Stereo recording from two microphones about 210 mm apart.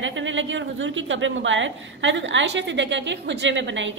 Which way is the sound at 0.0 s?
65° right (ahead or behind).